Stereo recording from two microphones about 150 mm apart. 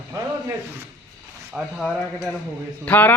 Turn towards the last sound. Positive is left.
turn(degrees=10)  # may be behind; listen again after turning